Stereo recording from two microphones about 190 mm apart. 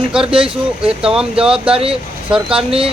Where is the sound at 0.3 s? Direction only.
30° right (ahead or behind).